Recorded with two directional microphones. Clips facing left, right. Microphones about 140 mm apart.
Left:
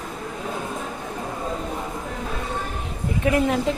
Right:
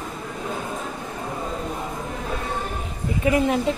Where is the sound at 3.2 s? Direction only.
Centre (ahead or behind).